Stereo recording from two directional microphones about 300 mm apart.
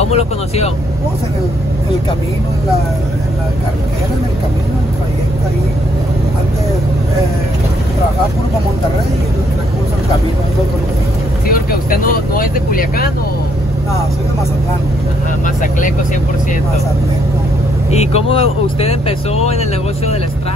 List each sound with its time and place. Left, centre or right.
0.1 s speech: left
11.4 s speech: left
15.4 s speech: left
17.9 s speech: centre